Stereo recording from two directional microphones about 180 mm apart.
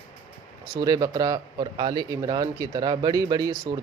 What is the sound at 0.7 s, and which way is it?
Speech, 20° right (ahead or behind).